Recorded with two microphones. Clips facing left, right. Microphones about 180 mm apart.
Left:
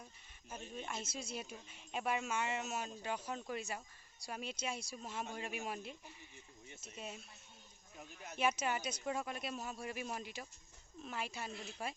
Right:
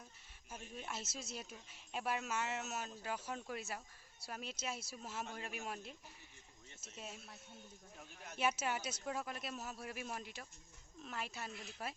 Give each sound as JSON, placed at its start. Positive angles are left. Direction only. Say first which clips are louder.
{"t": 0.7, "sound": "speech", "louder": "left 2 dB", "side_deg": -5}